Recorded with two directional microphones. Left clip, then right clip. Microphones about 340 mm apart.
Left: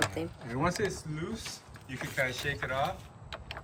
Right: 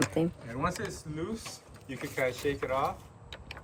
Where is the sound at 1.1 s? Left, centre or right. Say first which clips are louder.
Right 1 dB; centre.